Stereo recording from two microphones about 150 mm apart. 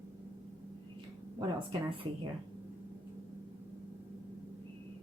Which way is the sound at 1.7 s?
35° right (ahead or behind).